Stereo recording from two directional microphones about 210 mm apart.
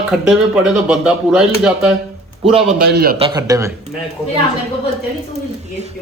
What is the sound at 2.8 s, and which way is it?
Speech, 50° right (ahead or behind).